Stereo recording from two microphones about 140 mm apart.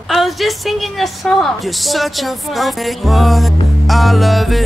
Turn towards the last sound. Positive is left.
turn(degrees=0)  # may be behind; listen again after turning